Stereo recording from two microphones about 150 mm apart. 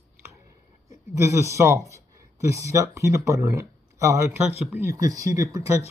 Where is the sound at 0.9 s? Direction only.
20° right (ahead or behind).